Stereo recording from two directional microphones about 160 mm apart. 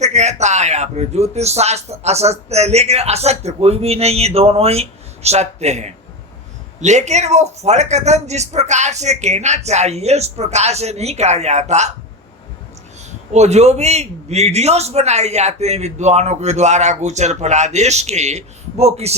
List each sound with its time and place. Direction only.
0.0 s a man's voice: 45° right (ahead or behind)
13.3 s a man's voice: 45° right (ahead or behind)